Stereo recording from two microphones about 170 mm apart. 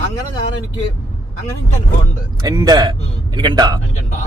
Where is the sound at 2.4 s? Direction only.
25° right (ahead or behind).